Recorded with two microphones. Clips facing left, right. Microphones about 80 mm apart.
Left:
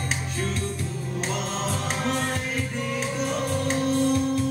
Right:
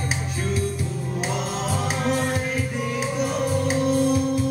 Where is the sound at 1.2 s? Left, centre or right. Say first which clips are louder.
Right 1 dB; centre.